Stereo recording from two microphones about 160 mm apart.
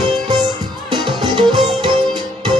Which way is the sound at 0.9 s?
30° right (ahead or behind).